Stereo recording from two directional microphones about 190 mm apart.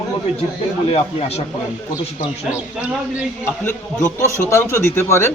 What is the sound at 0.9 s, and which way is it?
Speech, 30° left (ahead or behind).